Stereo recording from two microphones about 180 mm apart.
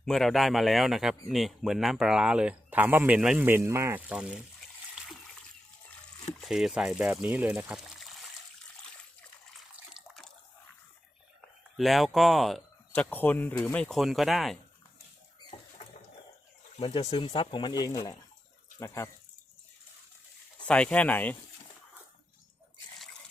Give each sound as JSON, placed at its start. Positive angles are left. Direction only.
{"t": 0.0, "sound": "a man's voice", "side_deg": 0}
{"t": 6.4, "sound": "speech", "side_deg": 0}
{"t": 9.6, "sound": "water", "side_deg": 0}
{"t": 11.8, "sound": "a man's voice", "side_deg": 0}
{"t": 12.9, "sound": "speech", "side_deg": 10}
{"t": 16.8, "sound": "speech", "side_deg": 25}
{"t": 20.7, "sound": "speech", "side_deg": 5}